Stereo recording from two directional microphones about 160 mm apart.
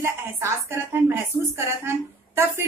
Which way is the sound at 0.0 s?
15° right (ahead or behind).